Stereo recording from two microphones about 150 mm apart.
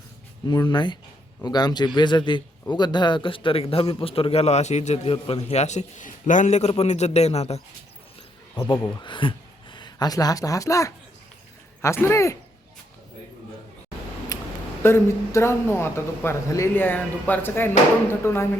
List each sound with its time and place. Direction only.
0.4 s a man's voice: 30° left (ahead or behind); by 5.1 s 50° left (ahead or behind)
5.1 s a man's voice: 40° left (ahead or behind)
9.0 s speech: 30° left (ahead or behind)
14.3 s a sound: 20° left (ahead or behind)
14.8 s speech: 15° left (ahead or behind)